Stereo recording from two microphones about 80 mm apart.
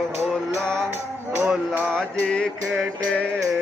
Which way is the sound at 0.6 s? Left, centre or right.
Centre.